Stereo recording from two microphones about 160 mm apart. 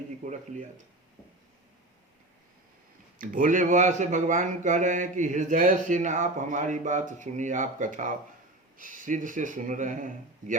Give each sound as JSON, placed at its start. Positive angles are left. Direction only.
{"t": 0.2, "sound": "speech", "side_deg": -50}
{"t": 3.2, "sound": "speech", "side_deg": -55}